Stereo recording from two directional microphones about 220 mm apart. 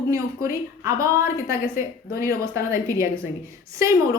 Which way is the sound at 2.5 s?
15° right (ahead or behind).